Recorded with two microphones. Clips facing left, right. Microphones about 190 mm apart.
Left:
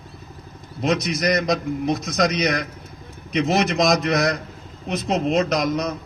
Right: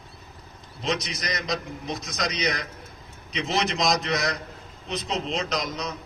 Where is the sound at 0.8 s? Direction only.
55° left (ahead or behind).